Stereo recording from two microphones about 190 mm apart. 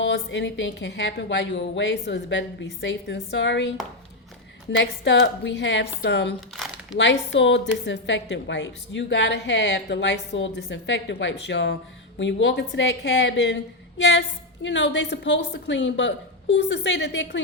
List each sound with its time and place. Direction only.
0.0 s a woman's voice: 70° left (ahead or behind)
4.8 s a woman's voice: 70° left (ahead or behind)